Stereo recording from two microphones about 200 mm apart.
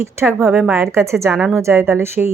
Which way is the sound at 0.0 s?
10° right (ahead or behind).